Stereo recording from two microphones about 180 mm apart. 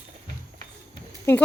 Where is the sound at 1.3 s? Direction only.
10° left (ahead or behind).